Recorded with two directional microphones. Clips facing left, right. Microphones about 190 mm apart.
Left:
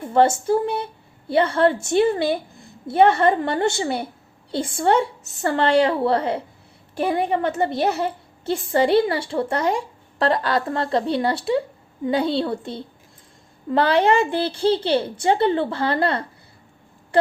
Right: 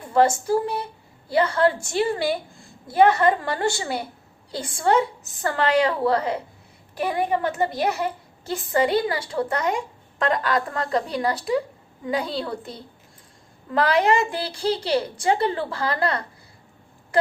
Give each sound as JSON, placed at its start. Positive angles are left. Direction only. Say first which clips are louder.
{"t": 0.0, "sound": "a child's voice", "louder": "left 2 dB", "side_deg": 25}